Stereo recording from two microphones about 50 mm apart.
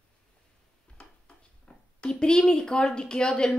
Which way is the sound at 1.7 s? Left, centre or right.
Centre.